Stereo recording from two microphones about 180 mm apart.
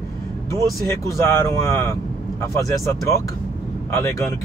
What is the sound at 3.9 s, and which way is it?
Speech, 15° left (ahead or behind).